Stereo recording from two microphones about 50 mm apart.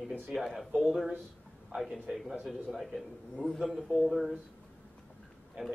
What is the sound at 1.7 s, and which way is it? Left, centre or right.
Speech, right.